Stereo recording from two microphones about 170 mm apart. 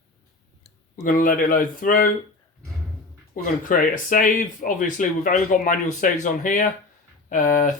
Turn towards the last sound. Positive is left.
turn(degrees=50)  # may be behind; listen again after turning